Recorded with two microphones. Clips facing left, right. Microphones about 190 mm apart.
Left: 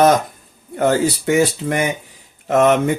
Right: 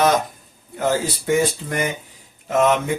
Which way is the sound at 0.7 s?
60° left (ahead or behind).